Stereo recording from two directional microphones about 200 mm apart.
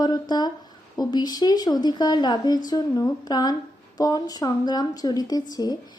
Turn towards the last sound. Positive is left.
turn(degrees=20)  # may be behind; listen again after turning